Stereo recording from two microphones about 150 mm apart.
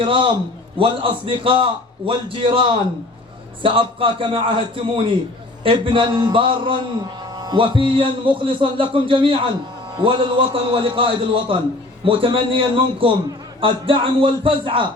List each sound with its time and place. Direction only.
0.0 s a man's voice: 35° right (ahead or behind)